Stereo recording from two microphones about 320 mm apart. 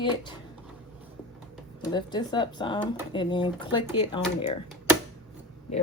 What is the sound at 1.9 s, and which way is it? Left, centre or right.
A woman's voice, centre.